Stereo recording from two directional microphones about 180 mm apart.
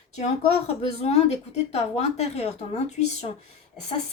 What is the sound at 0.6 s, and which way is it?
A woman's voice, 35° left (ahead or behind).